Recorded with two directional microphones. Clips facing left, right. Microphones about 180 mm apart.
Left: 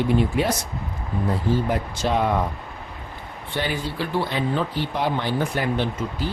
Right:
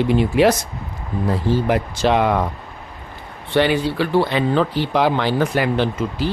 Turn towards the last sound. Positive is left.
turn(degrees=-90)